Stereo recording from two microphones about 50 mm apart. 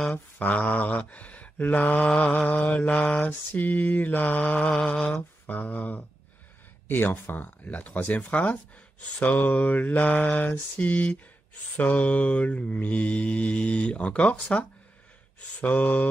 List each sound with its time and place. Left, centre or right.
0.1 s mantra: left
4.6 s speech: left
5.5 s mantra: left
11.7 s speech: left